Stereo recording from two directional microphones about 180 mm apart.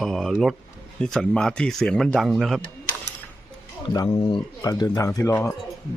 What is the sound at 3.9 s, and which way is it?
Speech, 25° left (ahead or behind).